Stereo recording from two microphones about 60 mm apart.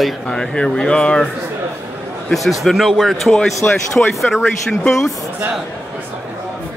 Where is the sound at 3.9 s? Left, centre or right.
Centre.